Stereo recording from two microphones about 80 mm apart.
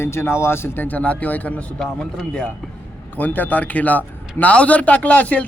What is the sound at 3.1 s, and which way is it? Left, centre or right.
Speech, left.